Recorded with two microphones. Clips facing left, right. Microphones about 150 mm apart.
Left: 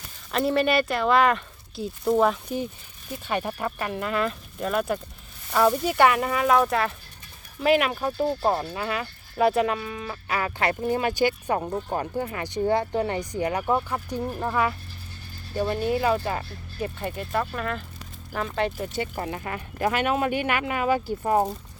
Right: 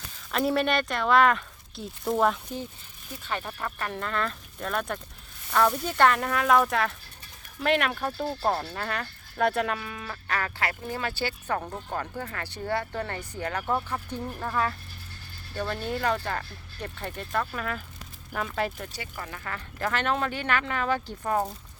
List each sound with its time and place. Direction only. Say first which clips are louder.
0.3 s speech: left 3 dB; centre (ahead or behind)
3.2 s speech: left 5 dB; 15° left (ahead or behind)
10.6 s speech: left 7 dB; 20° left (ahead or behind); by 18.7 s centre (ahead or behind)
19.1 s speech: left 6 dB; 30° left (ahead or behind); by 21.3 s 10° left (ahead or behind)